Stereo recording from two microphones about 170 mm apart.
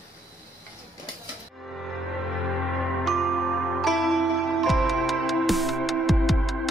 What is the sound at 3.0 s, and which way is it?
Music, centre (ahead or behind).